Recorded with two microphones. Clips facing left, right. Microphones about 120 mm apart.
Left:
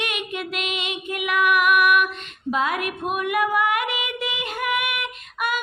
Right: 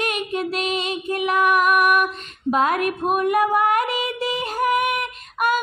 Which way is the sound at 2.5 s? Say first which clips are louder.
Right 4 dB; 45° right (ahead or behind).